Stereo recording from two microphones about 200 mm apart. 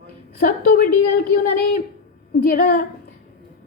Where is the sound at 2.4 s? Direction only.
50° left (ahead or behind).